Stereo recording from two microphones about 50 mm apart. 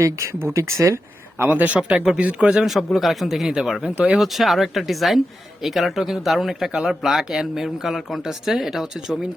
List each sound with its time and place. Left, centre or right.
0.5 s speech: right
1.4 s a man's voice: right
1.7 s speech: centre
2.6 s speech: centre
4.2 s speech: centre